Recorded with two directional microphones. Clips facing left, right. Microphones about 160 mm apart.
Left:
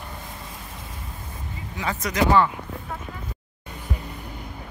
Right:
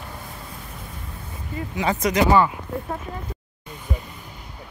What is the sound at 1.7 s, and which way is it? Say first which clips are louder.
Speech: right 4 dB; 15° right (ahead or behind).